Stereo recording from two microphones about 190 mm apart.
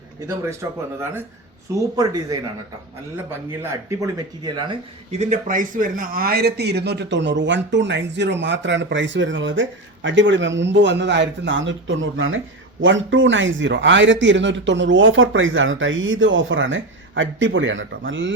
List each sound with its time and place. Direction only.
0.6 s speech: 15° right (ahead or behind)
3.5 s speech: 15° right (ahead or behind); by 18.3 s 75° right (ahead or behind)